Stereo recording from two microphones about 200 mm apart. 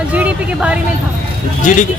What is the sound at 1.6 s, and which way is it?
Speech, 40° left (ahead or behind).